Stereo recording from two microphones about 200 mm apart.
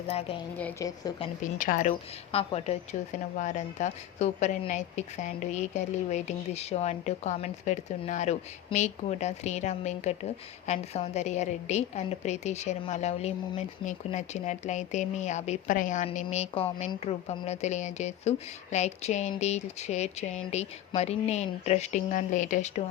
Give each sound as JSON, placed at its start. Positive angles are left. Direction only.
{"t": 0.1, "sound": "speech", "side_deg": 30}
{"t": 0.5, "sound": "a woman's voice", "side_deg": 5}
{"t": 0.9, "sound": "speech", "side_deg": 20}
{"t": 1.5, "sound": "speech", "side_deg": 40}